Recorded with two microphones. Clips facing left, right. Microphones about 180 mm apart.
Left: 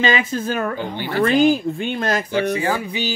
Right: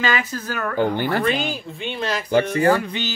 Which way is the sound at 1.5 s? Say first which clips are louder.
Left 9 dB; 50° left (ahead or behind).